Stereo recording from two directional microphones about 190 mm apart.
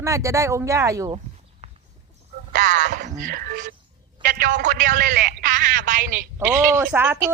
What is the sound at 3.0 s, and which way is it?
A man's voice, 45° right (ahead or behind).